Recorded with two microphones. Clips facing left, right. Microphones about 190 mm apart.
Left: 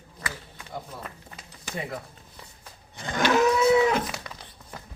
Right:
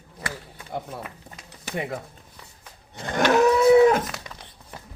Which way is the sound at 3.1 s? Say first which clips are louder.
Right 3 dB; 50° right (ahead or behind).